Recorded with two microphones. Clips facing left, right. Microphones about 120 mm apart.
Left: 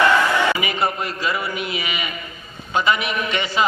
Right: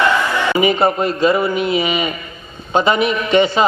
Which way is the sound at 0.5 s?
30° right (ahead or behind).